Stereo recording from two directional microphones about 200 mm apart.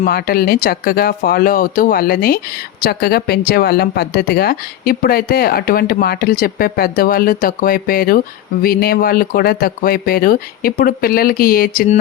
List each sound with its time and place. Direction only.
0.0 s speech: 50° left (ahead or behind)